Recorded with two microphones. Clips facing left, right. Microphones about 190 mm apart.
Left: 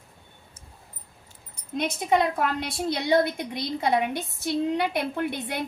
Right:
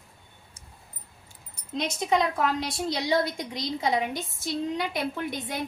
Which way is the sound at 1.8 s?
55° left (ahead or behind).